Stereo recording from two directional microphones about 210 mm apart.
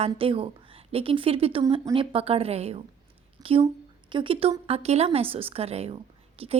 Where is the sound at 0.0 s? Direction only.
25° right (ahead or behind).